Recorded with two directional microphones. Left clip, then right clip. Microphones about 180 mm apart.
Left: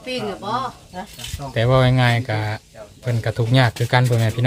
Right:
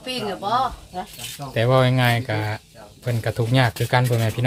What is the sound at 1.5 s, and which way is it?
Speech, centre (ahead or behind).